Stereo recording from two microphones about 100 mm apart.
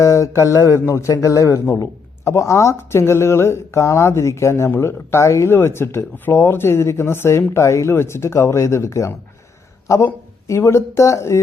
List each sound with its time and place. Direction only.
0.0 s a man's voice: 30° left (ahead or behind)